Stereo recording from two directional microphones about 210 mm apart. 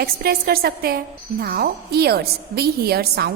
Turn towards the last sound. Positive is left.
turn(degrees=-50)  # may be behind; listen again after turning